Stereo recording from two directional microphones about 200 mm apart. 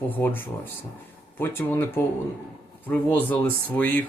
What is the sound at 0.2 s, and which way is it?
Speech, 10° left (ahead or behind).